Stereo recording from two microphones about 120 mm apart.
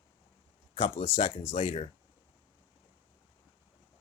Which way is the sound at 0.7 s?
60° left (ahead or behind).